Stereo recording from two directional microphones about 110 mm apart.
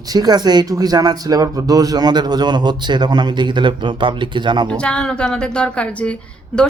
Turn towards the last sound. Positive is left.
turn(degrees=10)  # may be behind; listen again after turning